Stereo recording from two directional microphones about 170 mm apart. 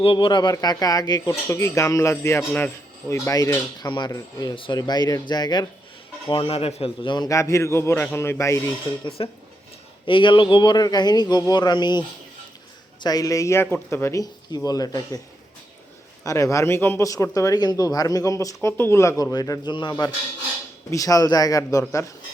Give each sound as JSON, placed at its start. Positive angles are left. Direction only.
{"t": 0.0, "sound": "a man's voice", "side_deg": 30}
{"t": 10.1, "sound": "speech", "side_deg": 30}
{"t": 16.2, "sound": "a man's voice", "side_deg": 20}